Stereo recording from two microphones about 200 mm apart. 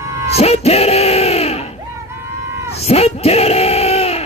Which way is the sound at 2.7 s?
30° left (ahead or behind).